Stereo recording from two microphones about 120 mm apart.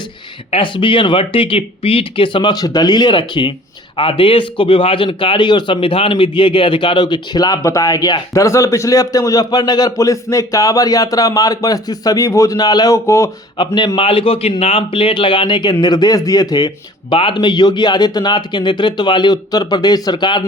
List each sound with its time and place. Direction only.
0.5 s a man's voice: 45° left (ahead or behind); by 13.3 s 25° left (ahead or behind)
13.7 s a man's voice: 40° left (ahead or behind)